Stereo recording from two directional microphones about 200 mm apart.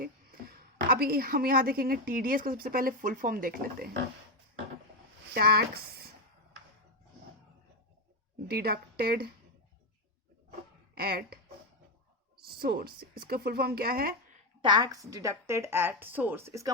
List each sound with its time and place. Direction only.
0.0 s a woman's voice: 45° right (ahead or behind)
5.3 s speech: 50° right (ahead or behind)
8.4 s speech: 50° right (ahead or behind)
10.9 s speech: 50° right (ahead or behind)
12.5 s speech: 50° right (ahead or behind)
14.6 s a woman's voice: 20° right (ahead or behind)